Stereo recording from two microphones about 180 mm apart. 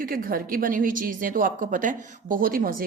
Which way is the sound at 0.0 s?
50° right (ahead or behind).